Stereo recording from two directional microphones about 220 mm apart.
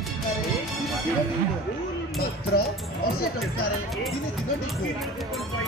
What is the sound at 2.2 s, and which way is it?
Speech, 45° left (ahead or behind).